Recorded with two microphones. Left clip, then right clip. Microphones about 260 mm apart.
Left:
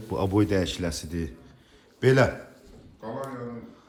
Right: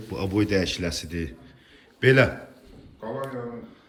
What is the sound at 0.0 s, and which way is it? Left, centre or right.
A man's voice, centre.